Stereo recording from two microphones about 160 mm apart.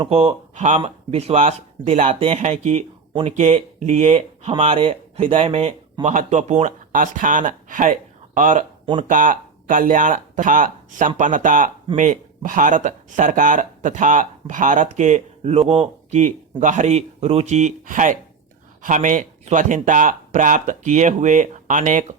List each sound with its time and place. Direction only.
0.0 s speech: 35° right (ahead or behind); by 22.0 s 55° right (ahead or behind)